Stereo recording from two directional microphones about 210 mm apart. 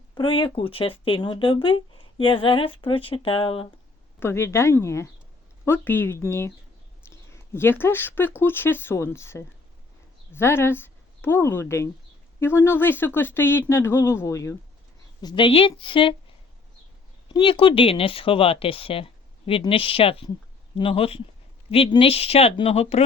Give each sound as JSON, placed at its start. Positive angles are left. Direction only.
{"t": 0.1, "sound": "speech", "side_deg": 25}
{"t": 4.2, "sound": "speech", "side_deg": 10}
{"t": 17.2, "sound": "speech", "side_deg": 25}